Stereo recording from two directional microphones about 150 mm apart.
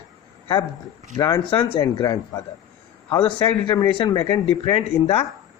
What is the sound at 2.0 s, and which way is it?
Speech, 25° left (ahead or behind).